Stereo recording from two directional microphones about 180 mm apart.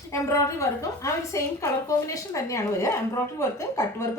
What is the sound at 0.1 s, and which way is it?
A woman's voice, 15° left (ahead or behind).